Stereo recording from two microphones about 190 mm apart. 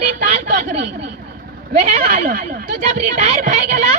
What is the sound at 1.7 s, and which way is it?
Speech, 35° right (ahead or behind).